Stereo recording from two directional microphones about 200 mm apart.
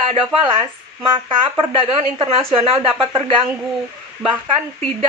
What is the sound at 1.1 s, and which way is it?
Speech, 25° right (ahead or behind).